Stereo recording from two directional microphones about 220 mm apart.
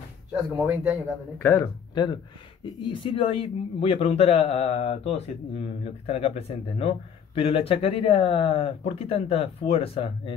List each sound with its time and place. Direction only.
0.3 s speech: 5° right (ahead or behind)
1.4 s speech: 15° left (ahead or behind)